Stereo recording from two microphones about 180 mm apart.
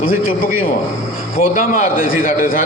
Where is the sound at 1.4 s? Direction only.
45° left (ahead or behind).